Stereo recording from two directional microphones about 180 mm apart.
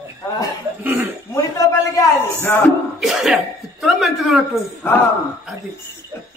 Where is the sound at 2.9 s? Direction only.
Centre (ahead or behind).